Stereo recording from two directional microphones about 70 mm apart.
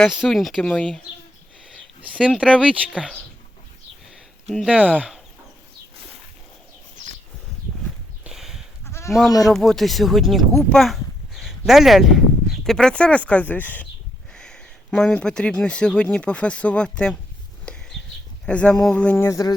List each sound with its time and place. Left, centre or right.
0.3 s speech: centre
0.6 s speech: centre
2.1 s speech: centre
4.7 s speech: right
8.3 s sheep: centre
8.9 s sheep: left
9.4 s speech: centre
12.7 s speech: centre
14.3 s a sound: centre
14.8 s speech: centre
17.7 s a sound: centre
18.4 s speech: centre
19.1 s a sound: left